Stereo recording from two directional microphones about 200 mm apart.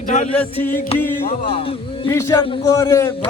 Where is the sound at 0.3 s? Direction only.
10° left (ahead or behind).